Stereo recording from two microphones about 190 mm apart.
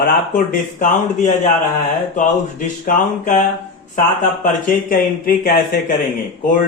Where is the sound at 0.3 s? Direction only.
45° left (ahead or behind).